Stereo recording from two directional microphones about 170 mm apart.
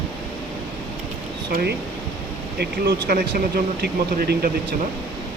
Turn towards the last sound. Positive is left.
turn(degrees=-60)  # may be behind; listen again after turning